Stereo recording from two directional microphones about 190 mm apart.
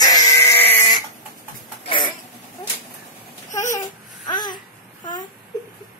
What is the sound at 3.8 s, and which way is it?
Baby cry, 20° left (ahead or behind).